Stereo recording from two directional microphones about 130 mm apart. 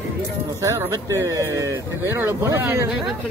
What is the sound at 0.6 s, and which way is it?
Speech, 20° right (ahead or behind).